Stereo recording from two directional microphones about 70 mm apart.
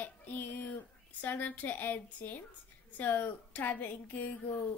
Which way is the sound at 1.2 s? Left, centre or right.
Left.